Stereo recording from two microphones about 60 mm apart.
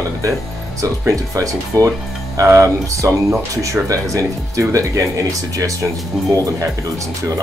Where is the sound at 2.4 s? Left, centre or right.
Right.